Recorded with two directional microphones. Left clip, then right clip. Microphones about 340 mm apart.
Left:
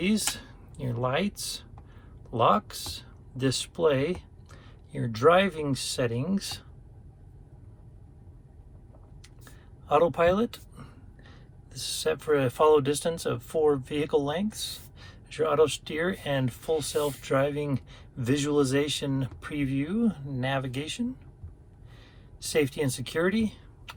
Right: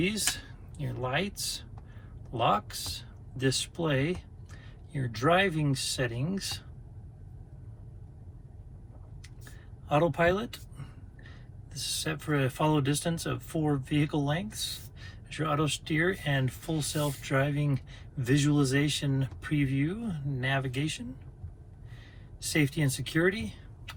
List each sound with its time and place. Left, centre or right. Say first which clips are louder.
0.0 s speech: left 1 dB; centre
9.4 s speech: even; centre
22.4 s speech: left 3 dB; centre